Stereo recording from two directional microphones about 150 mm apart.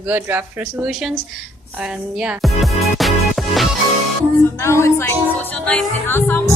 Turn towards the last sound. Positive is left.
turn(degrees=15)  # may be behind; listen again after turning